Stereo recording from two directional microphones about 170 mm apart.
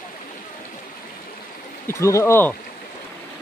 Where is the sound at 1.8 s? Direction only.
15° left (ahead or behind).